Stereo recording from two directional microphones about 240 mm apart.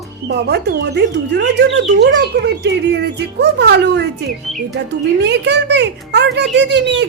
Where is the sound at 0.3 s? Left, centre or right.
Right.